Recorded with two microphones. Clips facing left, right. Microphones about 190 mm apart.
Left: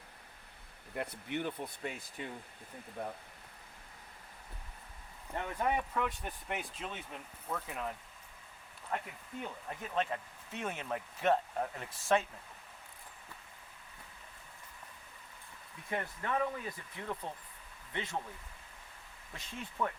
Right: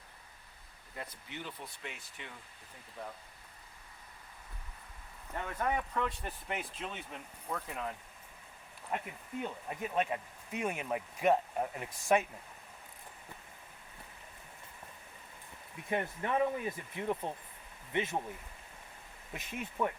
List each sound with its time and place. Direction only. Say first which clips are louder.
0.9 s speech: left 7 dB; 65° left (ahead or behind)
1.8 s speech: left 6 dB; 40° left (ahead or behind)
5.3 s speech: left 1 dB; 20° left (ahead or behind)
5.9 s speech: even; centre (ahead or behind)
8.9 s speech: right 2 dB; 15° right (ahead or behind)
15.9 s speech: right 3 dB; 20° right (ahead or behind)
19.3 s speech: right 4 dB; 20° right (ahead or behind)